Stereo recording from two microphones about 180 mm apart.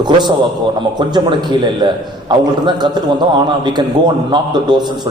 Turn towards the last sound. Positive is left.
turn(degrees=-25)  # may be behind; listen again after turning